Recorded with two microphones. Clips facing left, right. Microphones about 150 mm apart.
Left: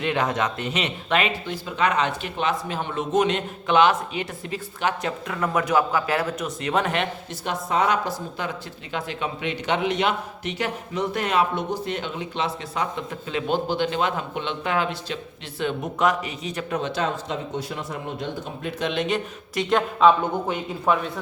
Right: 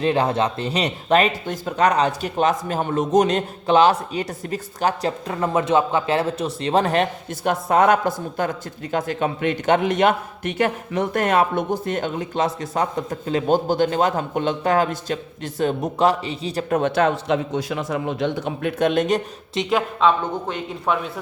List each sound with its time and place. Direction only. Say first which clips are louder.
0.0 s speech: right 4 dB; 30° right (ahead or behind)
7.4 s speech: right 6 dB; 50° right (ahead or behind); by 16.6 s 30° right (ahead or behind)
16.6 s speech: right 7 dB; 55° right (ahead or behind)
19.7 s a man's voice: left 1 dB; 5° left (ahead or behind)